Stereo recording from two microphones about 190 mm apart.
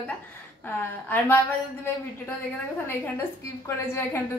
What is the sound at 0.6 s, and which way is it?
Speech, 10° left (ahead or behind).